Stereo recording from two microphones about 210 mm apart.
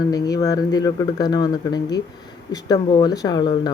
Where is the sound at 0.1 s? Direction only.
15° left (ahead or behind).